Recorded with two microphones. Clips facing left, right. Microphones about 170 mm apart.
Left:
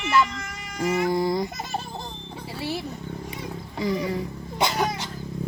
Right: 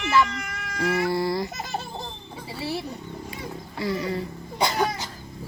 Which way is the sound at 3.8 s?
15° left (ahead or behind).